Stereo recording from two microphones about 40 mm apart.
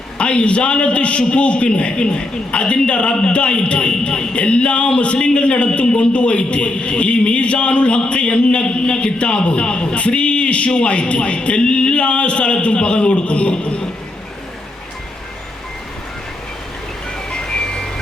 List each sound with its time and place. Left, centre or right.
0.2 s a man's voice: left
17.2 s music: centre